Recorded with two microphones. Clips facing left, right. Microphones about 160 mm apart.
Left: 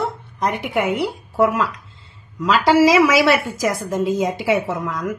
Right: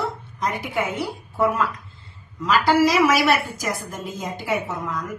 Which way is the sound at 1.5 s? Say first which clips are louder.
Left 2 dB; 80° left.